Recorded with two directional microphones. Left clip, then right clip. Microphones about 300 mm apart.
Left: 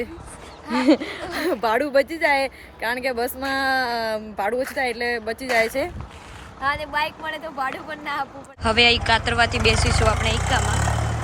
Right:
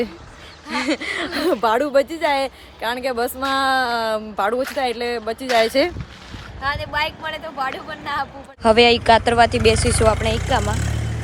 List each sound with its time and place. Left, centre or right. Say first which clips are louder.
0.7 s speech: left 3 dB; centre
1.4 s speech: right 3 dB; centre
10.6 s vehicle: left 2 dB; left